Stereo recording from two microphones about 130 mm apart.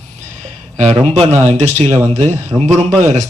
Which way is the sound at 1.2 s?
55° right (ahead or behind).